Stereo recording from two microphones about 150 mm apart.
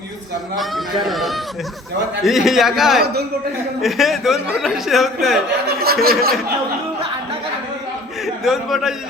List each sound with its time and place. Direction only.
0.6 s a man's voice: centre (ahead or behind)
5.6 s speech: 90° right
8.4 s a man's voice: 5° right (ahead or behind)